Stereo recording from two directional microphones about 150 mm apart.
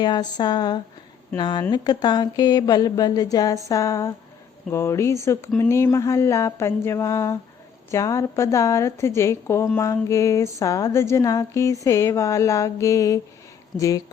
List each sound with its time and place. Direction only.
0.0 s a woman's voice: 30° left (ahead or behind)